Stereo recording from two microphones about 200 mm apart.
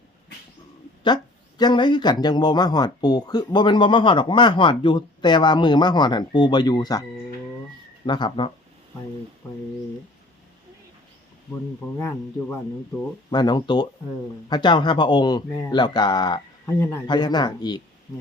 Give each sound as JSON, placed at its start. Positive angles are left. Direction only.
{"t": 1.0, "sound": "a man's voice", "side_deg": 20}
{"t": 8.0, "sound": "a man's voice", "side_deg": 25}
{"t": 11.9, "sound": "a man's voice", "side_deg": 15}